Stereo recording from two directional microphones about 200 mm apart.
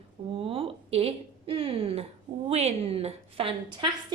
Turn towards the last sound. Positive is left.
turn(degrees=-25)  # may be behind; listen again after turning